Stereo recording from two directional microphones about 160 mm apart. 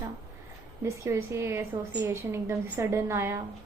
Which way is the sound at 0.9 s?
15° right (ahead or behind).